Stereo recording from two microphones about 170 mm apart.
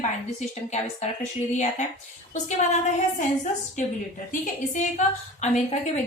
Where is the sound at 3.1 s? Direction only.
45° left (ahead or behind).